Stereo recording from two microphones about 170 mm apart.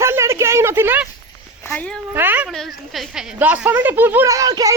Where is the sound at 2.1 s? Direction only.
10° right (ahead or behind).